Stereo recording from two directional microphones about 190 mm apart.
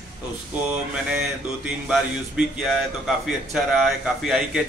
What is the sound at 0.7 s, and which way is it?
Speech, 5° right (ahead or behind).